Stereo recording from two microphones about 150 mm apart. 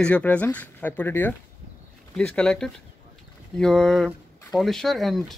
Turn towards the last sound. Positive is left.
turn(degrees=0)  # may be behind; listen again after turning